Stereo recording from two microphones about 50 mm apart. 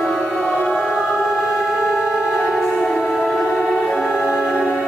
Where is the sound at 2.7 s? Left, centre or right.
Centre.